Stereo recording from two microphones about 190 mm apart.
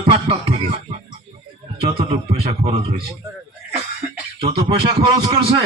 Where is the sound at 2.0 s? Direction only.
30° right (ahead or behind).